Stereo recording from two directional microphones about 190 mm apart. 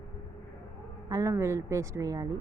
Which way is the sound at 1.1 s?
15° right (ahead or behind).